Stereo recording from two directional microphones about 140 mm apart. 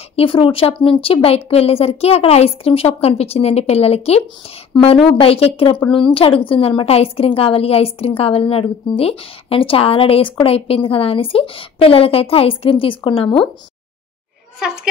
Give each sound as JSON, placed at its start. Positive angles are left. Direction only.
{"t": 0.1, "sound": "a woman's voice", "side_deg": 40}
{"t": 4.7, "sound": "a woman's voice", "side_deg": 35}